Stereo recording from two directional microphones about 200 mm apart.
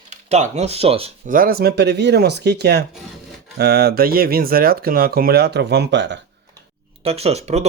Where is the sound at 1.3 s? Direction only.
45° right (ahead or behind); by 6.2 s 60° right (ahead or behind).